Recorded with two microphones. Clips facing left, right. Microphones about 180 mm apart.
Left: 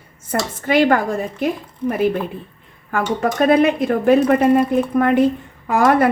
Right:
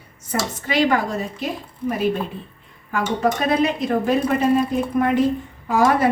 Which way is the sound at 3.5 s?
55° left (ahead or behind).